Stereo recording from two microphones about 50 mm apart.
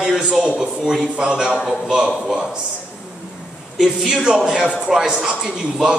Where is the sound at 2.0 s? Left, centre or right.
Centre.